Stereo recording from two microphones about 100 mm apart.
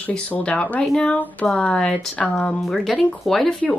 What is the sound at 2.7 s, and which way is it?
Speech, centre (ahead or behind).